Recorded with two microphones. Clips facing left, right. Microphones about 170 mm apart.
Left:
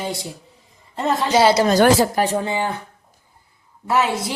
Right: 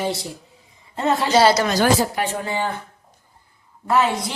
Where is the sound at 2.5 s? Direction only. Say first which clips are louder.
Left 1 dB; 15° left (ahead or behind).